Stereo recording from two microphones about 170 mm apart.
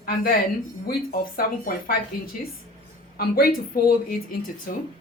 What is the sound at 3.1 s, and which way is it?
Speech, 60° left (ahead or behind).